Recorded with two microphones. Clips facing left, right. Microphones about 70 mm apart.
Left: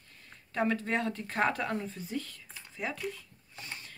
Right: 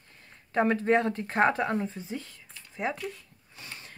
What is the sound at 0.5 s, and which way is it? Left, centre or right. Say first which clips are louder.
Speech: right 6 dB; right.